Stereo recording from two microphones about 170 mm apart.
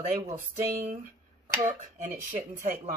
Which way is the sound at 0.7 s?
45° right (ahead or behind).